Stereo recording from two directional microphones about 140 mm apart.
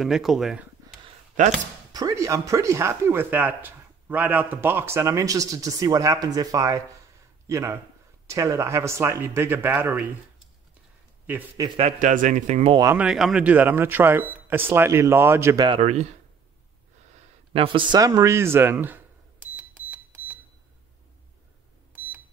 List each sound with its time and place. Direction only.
0.0 s speech: centre (ahead or behind)
1.4 s speech: 65° right (ahead or behind)
1.9 s speech: 25° right (ahead or behind)
11.6 s speech: 25° right (ahead or behind)
12.0 s speech: 65° right (ahead or behind)
12.8 s speech: 10° right (ahead or behind)
15.8 s speech: 50° right (ahead or behind)
17.5 s a man's voice: 40° right (ahead or behind)
17.9 s a sound: 25° right (ahead or behind); by 20.3 s 10° right (ahead or behind)